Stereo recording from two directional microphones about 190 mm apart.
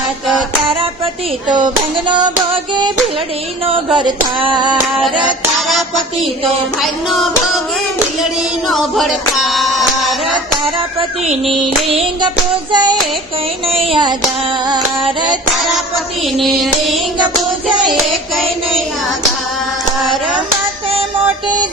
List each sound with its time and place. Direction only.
1.5 s music: 25° right (ahead or behind)
3.9 s music: 25° right (ahead or behind)
5.5 s music: centre (ahead or behind)
6.8 s child singing: centre (ahead or behind)
8.2 s music: centre (ahead or behind)
11.9 s music: 30° right (ahead or behind)
16.4 s child singing: centre (ahead or behind)